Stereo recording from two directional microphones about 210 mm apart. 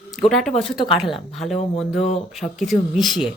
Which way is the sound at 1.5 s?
30° left (ahead or behind).